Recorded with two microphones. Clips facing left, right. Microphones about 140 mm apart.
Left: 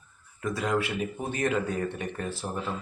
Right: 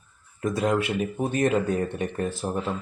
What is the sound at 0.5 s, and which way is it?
Speech, 20° right (ahead or behind).